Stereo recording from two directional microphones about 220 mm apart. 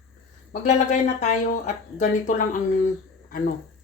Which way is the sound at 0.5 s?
35° left (ahead or behind).